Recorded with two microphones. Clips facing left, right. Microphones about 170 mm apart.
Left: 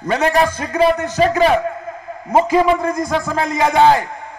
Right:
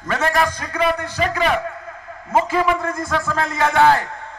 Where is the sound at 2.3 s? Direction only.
15° left (ahead or behind).